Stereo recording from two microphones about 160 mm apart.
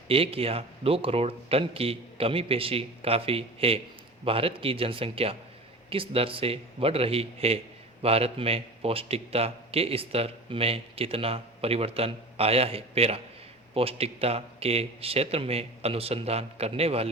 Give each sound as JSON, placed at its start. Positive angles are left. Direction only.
{"t": 0.1, "sound": "a man's voice", "side_deg": -35}